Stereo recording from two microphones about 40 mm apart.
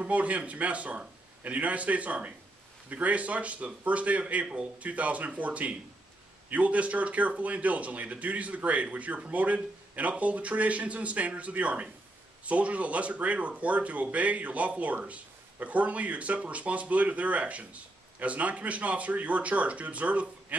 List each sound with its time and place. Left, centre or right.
0.0 s speech: right